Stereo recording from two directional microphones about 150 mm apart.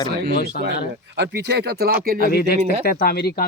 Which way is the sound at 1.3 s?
90° right.